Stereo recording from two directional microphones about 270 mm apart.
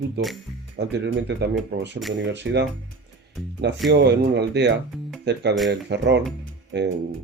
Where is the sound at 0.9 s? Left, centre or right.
Right.